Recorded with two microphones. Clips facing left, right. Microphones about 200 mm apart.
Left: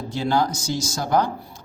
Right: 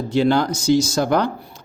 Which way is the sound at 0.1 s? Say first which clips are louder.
Right 5 dB; 65° right (ahead or behind).